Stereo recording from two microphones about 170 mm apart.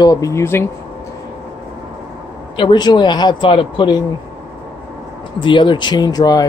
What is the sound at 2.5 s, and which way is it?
Speech, 30° left (ahead or behind).